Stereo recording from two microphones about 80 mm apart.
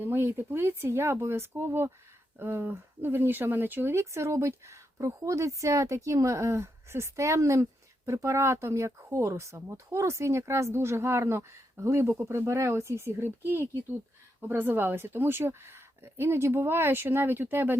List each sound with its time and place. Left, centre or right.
0.0 s a woman's voice: right
4.0 s a woman's voice: right